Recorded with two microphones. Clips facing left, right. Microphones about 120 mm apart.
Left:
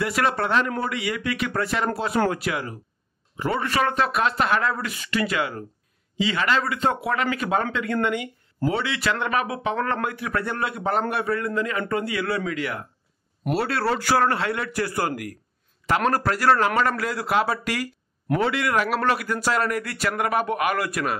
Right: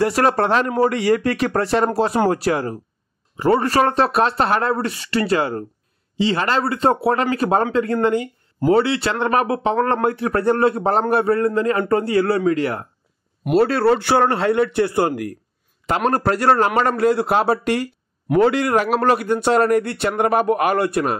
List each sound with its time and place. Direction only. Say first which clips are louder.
0.0 s a man's voice: right 6 dB; 35° right (ahead or behind)